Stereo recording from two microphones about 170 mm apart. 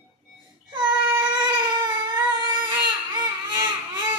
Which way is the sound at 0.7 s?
25° right (ahead or behind).